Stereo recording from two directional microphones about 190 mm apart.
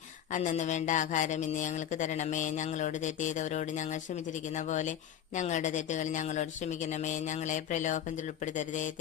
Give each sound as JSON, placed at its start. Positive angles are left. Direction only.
{"t": 0.3, "sound": "speech", "side_deg": 40}